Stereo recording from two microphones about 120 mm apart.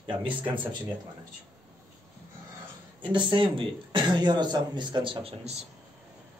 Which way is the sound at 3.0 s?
40° right (ahead or behind).